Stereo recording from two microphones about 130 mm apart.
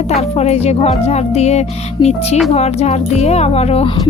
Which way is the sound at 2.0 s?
35° left (ahead or behind).